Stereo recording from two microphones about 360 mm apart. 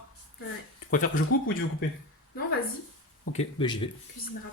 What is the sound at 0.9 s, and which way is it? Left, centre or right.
Speech, left.